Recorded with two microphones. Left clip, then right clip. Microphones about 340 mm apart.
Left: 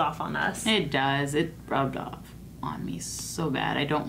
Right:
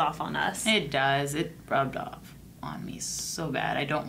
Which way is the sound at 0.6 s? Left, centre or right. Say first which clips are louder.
Right 1 dB; right.